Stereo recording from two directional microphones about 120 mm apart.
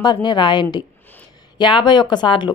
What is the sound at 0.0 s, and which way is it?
A woman's voice, 40° left (ahead or behind).